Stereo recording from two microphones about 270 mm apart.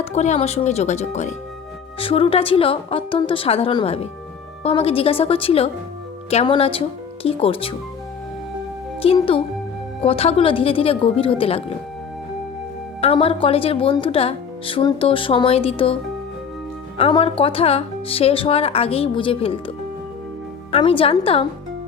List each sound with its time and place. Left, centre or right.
0.0 s speech: left
9.0 s speech: centre
13.0 s speech: left
17.0 s speech: centre